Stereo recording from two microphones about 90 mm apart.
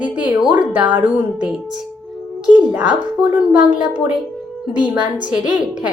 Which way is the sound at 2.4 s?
10° right (ahead or behind).